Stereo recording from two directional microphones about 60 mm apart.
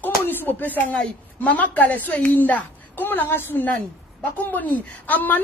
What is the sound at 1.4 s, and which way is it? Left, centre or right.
A woman's voice, left.